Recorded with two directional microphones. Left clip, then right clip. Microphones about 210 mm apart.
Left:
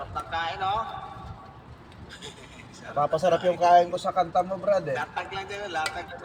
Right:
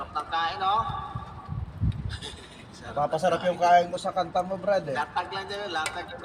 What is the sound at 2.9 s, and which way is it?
A man's voice, centre (ahead or behind).